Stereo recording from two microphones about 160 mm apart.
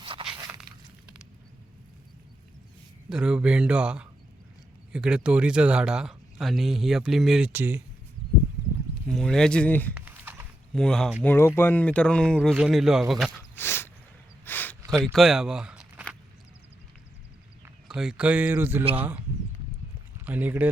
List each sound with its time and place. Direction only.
0.0 s crunch: 35° right (ahead or behind)
3.1 s speech: 5° right (ahead or behind)
9.0 s speech: 5° left (ahead or behind)
9.9 s typing: 10° right (ahead or behind)
10.8 s speech: 5° left (ahead or behind)
13.6 s a sound: 15° left (ahead or behind)
14.9 s speech: centre (ahead or behind)
17.8 s speech: 5° right (ahead or behind)
20.2 s speech: 10° right (ahead or behind)